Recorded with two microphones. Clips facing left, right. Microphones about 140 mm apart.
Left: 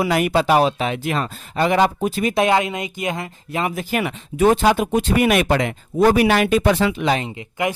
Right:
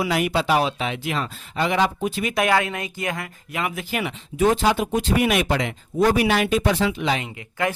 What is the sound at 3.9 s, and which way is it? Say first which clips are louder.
Speech: left 3 dB; 55° left (ahead or behind).